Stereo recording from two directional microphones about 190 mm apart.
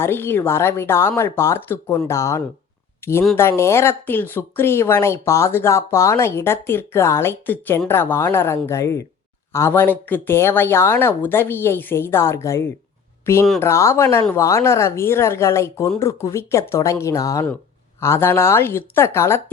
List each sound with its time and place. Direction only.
0.0 s speech: 10° left (ahead or behind)